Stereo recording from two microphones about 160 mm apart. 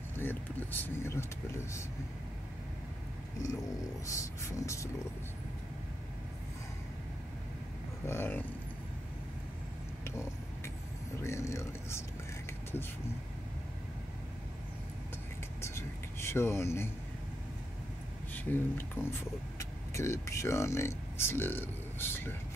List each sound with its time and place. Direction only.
0.2 s speech: 10° left (ahead or behind)
4.0 s speech: 20° left (ahead or behind)
8.1 s speech: 15° left (ahead or behind)
10.0 s vehicle: 15° left (ahead or behind)
11.1 s a sound: 15° left (ahead or behind)
15.6 s a sound: 15° left (ahead or behind)
18.3 s speech: 10° left (ahead or behind)